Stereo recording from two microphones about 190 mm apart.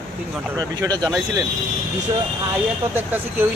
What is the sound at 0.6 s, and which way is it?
Speech, 20° right (ahead or behind).